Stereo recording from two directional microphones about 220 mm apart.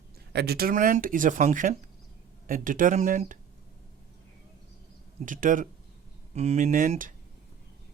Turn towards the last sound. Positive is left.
turn(degrees=-35)  # may be behind; listen again after turning